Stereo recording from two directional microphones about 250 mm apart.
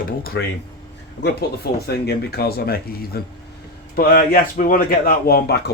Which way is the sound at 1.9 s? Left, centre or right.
Left.